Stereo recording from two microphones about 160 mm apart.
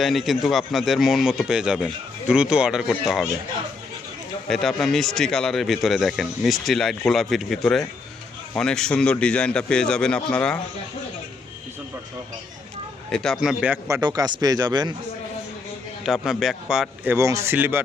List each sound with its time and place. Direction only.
0.0 s speech: centre (ahead or behind)
4.4 s speech: centre (ahead or behind)
13.1 s speech: 5° left (ahead or behind)
13.8 s a man's voice: 20° right (ahead or behind)
16.0 s speech: centre (ahead or behind)